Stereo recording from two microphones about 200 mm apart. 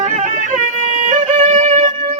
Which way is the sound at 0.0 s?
35° right (ahead or behind).